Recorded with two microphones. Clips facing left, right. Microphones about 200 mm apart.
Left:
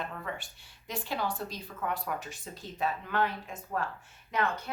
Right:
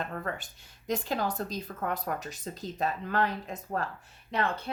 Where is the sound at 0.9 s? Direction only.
45° right (ahead or behind).